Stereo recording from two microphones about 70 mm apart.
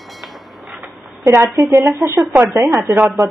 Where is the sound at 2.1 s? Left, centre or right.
Right.